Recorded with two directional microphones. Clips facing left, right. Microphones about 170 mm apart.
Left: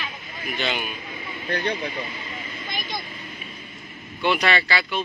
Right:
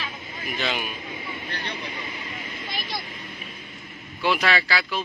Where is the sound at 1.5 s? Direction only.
60° left (ahead or behind).